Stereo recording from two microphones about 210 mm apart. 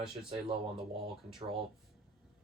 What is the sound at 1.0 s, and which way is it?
Speech, centre (ahead or behind).